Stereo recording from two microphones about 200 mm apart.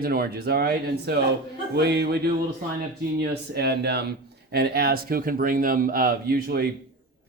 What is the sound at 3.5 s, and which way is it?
Speech, 55° right (ahead or behind).